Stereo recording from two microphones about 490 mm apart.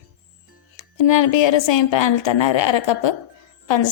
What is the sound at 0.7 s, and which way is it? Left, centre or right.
A woman's voice, left.